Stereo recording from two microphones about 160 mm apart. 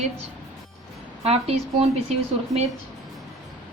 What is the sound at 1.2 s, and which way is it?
Speech, 40° right (ahead or behind).